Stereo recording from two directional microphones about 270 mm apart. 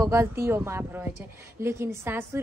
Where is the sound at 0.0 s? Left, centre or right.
Centre.